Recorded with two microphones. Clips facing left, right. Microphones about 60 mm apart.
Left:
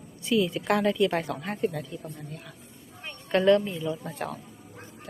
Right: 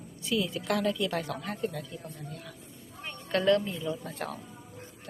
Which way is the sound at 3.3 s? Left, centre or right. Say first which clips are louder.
Left 4 dB; left.